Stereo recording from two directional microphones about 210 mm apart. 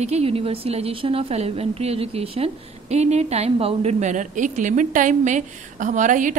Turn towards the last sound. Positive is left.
turn(degrees=-35)  # may be behind; listen again after turning